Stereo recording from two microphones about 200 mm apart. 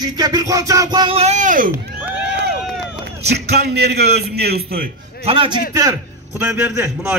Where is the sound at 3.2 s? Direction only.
55° right (ahead or behind).